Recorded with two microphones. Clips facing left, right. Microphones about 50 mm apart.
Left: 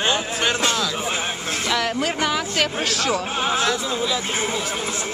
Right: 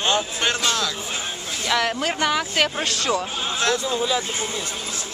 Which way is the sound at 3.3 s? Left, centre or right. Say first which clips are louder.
Left 5 dB; left.